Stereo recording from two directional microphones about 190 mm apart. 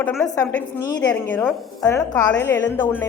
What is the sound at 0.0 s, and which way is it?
Speech, 5° left (ahead or behind).